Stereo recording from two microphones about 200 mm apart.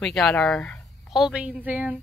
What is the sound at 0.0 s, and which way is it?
A woman's voice, centre (ahead or behind).